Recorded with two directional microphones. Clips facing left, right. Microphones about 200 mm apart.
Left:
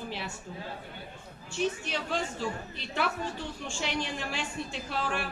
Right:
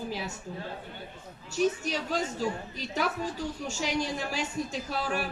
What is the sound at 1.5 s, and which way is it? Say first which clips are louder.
A woman's voice: right 4 dB; 40° right (ahead or behind).